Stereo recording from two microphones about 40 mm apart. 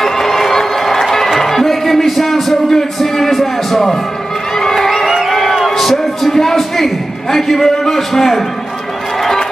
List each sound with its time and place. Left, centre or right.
0.0 s music: centre
4.6 s crowd: centre
5.8 s a sound: centre